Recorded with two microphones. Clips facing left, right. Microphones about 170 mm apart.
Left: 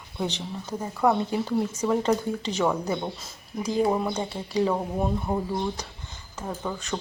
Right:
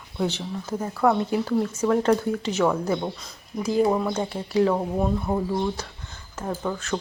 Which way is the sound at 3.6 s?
5° right (ahead or behind).